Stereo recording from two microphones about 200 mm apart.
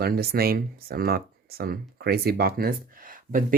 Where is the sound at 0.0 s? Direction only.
50° right (ahead or behind).